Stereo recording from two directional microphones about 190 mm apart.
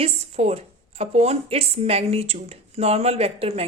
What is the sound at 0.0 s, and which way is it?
A woman's voice, 35° right (ahead or behind).